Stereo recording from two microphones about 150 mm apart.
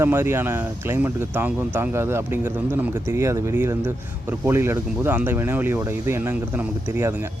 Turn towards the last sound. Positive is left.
turn(degrees=-10)  # may be behind; listen again after turning